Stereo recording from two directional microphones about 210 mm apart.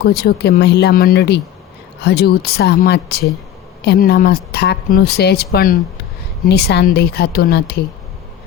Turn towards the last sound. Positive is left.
turn(degrees=50)  # may be behind; listen again after turning